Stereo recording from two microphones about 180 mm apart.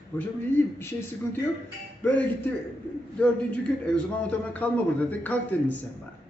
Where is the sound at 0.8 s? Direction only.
10° left (ahead or behind).